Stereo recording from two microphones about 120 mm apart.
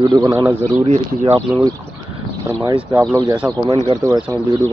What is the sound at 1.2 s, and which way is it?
Speech, 40° right (ahead or behind).